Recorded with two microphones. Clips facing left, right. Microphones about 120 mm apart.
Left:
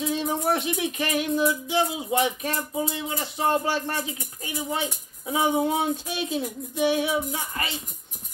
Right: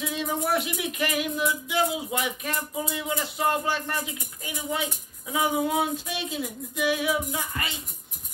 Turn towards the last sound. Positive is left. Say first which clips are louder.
# left 1 dB
turn(degrees=35)  # may be behind; listen again after turning